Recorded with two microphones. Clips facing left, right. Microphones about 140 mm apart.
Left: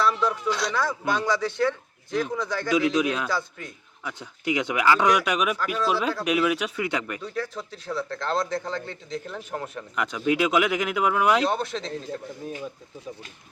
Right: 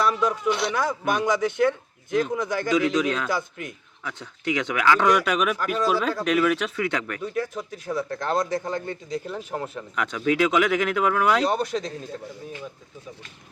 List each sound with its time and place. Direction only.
0.0 s speech: 15° right (ahead or behind)
2.9 s speech: 5° left (ahead or behind)
3.2 s speech: 15° right (ahead or behind)
4.0 s speech: 5° left (ahead or behind)
7.5 s speech: 15° right (ahead or behind); by 11.4 s 5° left (ahead or behind)
11.4 s speech: 10° right (ahead or behind)